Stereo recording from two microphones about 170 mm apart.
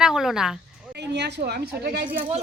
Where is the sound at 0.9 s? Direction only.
80° right.